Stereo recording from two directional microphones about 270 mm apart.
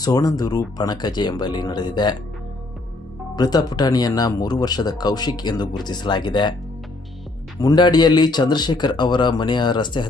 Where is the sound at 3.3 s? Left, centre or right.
Centre.